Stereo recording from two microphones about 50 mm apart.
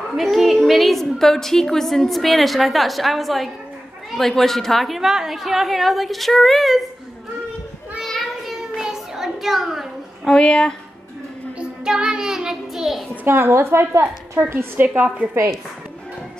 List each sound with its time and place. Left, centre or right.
0.1 s a woman's voice: centre
8.0 s child singing: centre
8.7 s child singing: centre
10.3 s speech: centre
11.5 s child singing: centre
13.1 s a woman's voice: right
13.4 s a woman's voice: right
14.4 s a woman's voice: right